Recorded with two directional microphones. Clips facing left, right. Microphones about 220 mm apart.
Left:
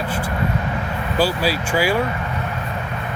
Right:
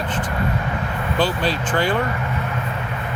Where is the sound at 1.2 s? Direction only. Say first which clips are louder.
Left 2 dB; 10° left (ahead or behind).